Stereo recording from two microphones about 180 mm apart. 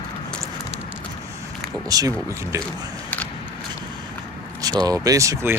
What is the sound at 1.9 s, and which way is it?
Speech, 20° right (ahead or behind).